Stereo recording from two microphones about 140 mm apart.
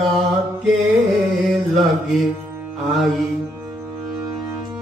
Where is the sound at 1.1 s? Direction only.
Centre (ahead or behind).